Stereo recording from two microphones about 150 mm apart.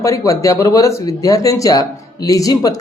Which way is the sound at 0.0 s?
20° left (ahead or behind).